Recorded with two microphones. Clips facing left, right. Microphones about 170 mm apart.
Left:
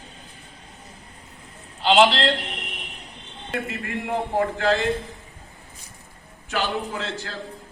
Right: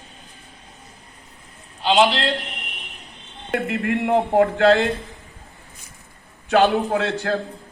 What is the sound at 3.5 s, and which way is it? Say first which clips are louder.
A man's voice: right 7 dB; 60° right (ahead or behind).